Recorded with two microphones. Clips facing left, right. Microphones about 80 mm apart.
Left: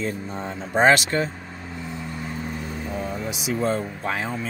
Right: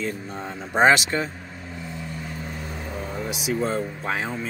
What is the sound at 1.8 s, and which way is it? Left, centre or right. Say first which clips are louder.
Vehicle: left 2 dB; left.